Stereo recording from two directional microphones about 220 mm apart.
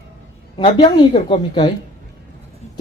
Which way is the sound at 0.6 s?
25° left (ahead or behind).